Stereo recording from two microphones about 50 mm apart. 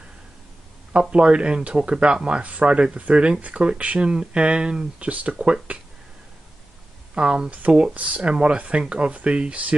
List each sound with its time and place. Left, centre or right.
1.1 s speech: right
7.2 s speech: centre
7.5 s speech: right